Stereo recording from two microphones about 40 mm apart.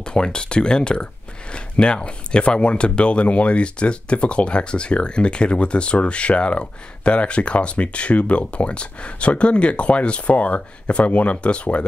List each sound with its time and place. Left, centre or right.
0.0 s speech: left